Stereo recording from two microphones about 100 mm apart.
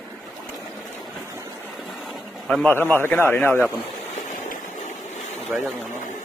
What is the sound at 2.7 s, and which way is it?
Speech, 20° left (ahead or behind).